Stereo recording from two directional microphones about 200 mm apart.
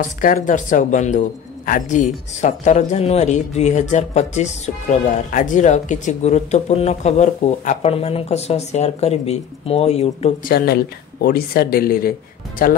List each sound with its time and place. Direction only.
0.2 s speech: 40° left (ahead or behind)
10.4 s speech: 50° left (ahead or behind)